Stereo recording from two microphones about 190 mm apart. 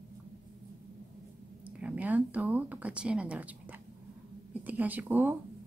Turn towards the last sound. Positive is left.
turn(degrees=-10)  # may be behind; listen again after turning